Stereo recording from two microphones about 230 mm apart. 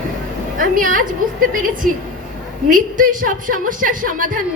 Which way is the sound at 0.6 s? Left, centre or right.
Right.